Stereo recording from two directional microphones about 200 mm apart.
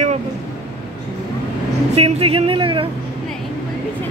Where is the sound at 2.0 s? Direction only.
30° right (ahead or behind).